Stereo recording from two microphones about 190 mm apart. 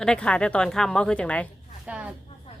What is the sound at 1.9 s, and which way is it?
Speech, 5° right (ahead or behind).